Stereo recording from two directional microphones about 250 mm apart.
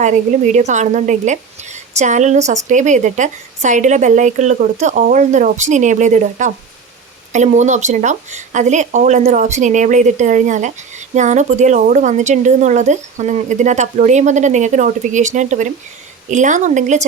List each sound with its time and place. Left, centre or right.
0.0 s a woman's voice: right